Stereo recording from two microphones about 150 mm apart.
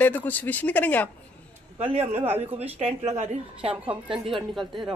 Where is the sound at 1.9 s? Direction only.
45° right (ahead or behind).